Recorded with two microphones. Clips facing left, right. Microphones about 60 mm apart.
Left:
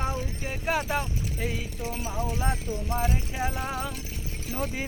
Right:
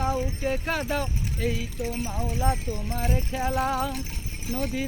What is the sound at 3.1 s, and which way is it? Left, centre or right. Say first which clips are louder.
Speech: right 4 dB; centre.